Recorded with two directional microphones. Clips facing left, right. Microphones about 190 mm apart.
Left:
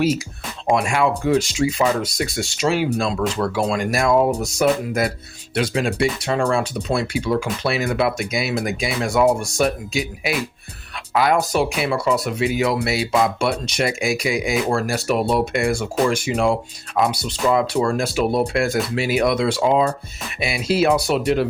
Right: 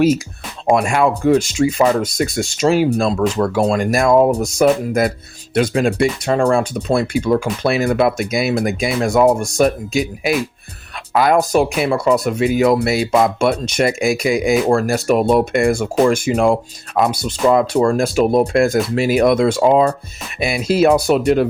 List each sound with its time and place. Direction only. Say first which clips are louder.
0.7 s speech: right 4 dB; 45° right (ahead or behind)